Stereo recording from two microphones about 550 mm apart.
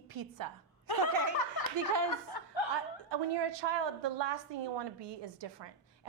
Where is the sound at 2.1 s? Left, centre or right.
Left.